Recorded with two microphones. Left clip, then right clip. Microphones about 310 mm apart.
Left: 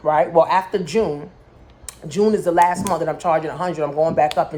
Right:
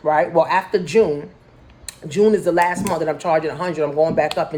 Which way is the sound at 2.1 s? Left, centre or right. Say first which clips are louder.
Even; centre.